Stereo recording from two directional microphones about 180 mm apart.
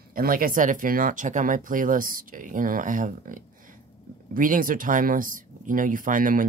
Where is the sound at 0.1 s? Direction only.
50° right (ahead or behind).